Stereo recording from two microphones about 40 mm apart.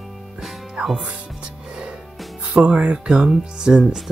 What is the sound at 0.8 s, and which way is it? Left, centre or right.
Speech, right.